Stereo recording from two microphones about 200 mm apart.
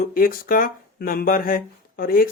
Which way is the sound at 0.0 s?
45° left (ahead or behind).